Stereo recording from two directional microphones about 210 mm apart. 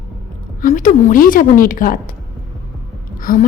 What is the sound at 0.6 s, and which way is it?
A woman's voice, 40° left (ahead or behind).